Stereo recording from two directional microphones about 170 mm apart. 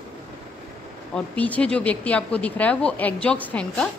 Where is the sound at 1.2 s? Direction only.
10° left (ahead or behind).